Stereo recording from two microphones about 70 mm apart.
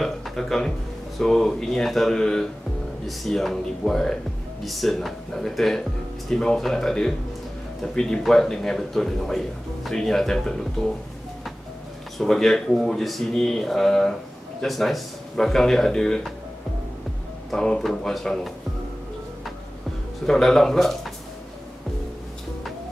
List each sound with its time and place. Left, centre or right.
0.0 s speech: centre
12.2 s speech: centre
17.5 s speech: centre
20.2 s speech: centre